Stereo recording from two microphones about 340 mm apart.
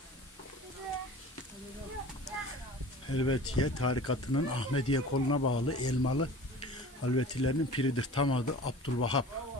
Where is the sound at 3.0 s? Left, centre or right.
Left.